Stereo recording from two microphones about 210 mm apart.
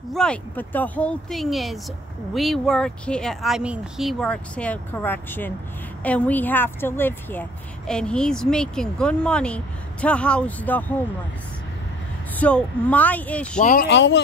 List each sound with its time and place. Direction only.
0.1 s a woman's voice: 5° left (ahead or behind)
12.4 s speech: 5° left (ahead or behind)
13.6 s speech: 40° left (ahead or behind)
13.8 s speech: 55° left (ahead or behind)